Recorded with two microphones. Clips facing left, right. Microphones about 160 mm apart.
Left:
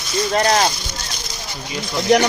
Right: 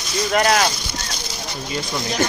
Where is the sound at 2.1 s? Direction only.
80° left.